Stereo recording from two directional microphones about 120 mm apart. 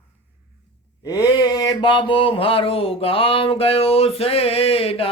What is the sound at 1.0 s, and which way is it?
Mantra, 35° left (ahead or behind).